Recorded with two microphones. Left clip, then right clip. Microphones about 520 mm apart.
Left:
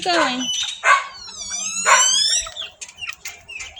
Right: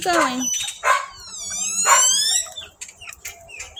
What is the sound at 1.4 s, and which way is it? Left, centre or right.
Police car, right.